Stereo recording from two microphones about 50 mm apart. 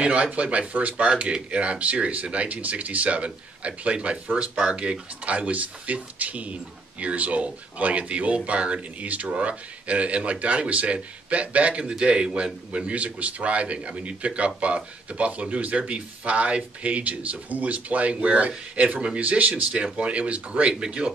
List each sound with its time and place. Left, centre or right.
0.0 s speech: right